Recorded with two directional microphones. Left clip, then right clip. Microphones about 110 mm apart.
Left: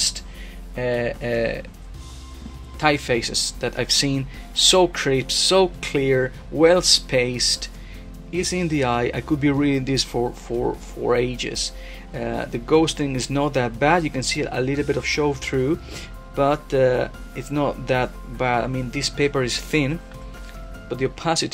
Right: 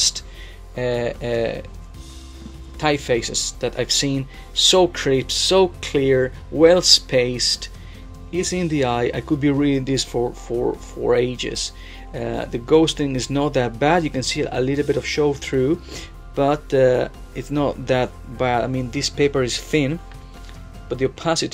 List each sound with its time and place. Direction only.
0.7 s speech: 35° right (ahead or behind)
2.8 s speech: 15° right (ahead or behind)